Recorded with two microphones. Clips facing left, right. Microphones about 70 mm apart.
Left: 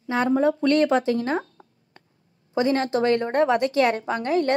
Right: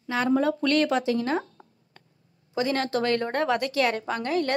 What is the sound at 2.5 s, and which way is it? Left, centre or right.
A woman's voice, left.